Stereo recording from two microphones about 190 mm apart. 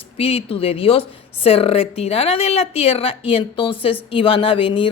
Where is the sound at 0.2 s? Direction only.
30° left (ahead or behind).